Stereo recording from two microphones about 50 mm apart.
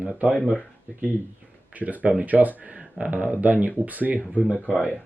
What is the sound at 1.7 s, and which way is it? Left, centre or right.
Speech, right.